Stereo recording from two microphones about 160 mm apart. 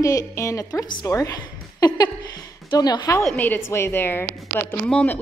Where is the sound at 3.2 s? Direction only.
10° left (ahead or behind).